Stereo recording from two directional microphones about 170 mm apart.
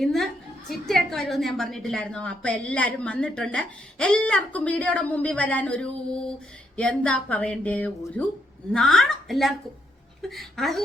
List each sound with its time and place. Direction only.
0.0 s a woman's voice: centre (ahead or behind)